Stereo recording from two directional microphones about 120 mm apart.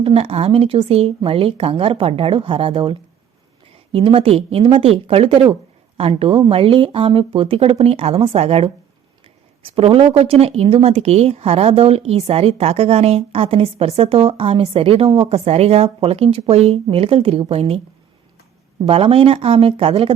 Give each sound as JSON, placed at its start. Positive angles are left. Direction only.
{"t": 0.0, "sound": "a woman's voice", "side_deg": -50}
{"t": 18.9, "sound": "speech", "side_deg": -50}